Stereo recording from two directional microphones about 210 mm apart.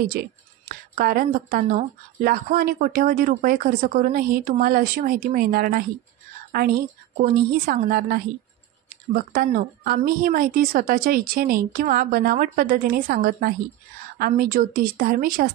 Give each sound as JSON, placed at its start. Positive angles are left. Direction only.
{"t": 0.0, "sound": "speech", "side_deg": -45}
{"t": 7.2, "sound": "speech", "side_deg": -45}